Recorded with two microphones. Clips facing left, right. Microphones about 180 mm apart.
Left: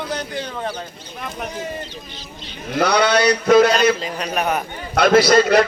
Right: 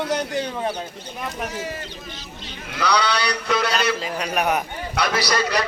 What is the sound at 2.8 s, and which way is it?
A man's voice, 50° left (ahead or behind).